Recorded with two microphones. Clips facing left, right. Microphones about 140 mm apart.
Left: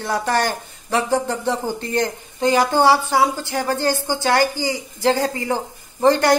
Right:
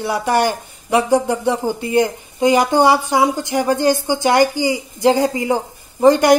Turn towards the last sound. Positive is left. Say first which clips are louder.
# right 4 dB
turn(degrees=-15)  # may be behind; listen again after turning